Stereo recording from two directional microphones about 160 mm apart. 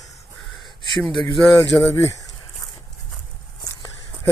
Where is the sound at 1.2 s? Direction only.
20° left (ahead or behind).